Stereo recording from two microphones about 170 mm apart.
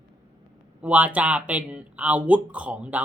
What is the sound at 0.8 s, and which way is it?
Speech, 10° right (ahead or behind).